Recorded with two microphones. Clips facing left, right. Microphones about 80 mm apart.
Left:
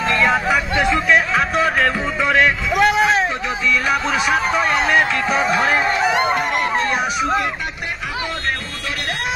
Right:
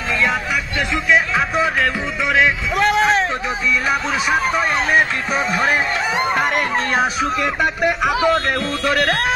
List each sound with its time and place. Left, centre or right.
0.1 s music: centre
2.7 s a sound: centre
4.3 s music: centre
5.3 s speech: left
7.6 s speech: right